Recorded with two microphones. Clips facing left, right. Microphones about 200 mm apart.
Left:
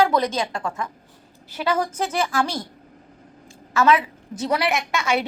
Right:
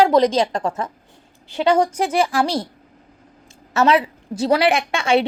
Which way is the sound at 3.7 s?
35° right (ahead or behind).